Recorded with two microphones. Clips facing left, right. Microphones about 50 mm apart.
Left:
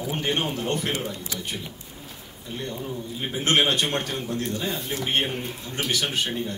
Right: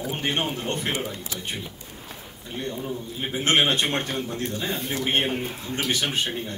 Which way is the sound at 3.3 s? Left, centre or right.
Right.